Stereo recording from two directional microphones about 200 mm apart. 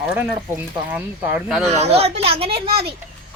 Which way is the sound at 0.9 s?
5° right (ahead or behind).